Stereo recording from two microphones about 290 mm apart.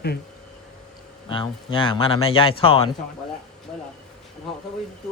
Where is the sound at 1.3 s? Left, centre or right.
Centre.